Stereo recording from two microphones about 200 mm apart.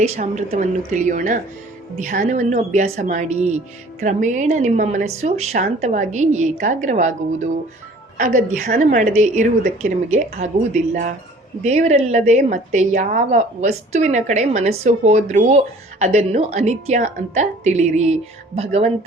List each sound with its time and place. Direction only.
0.0 s a woman's voice: 40° right (ahead or behind)
11.6 s a woman's voice: 35° right (ahead or behind)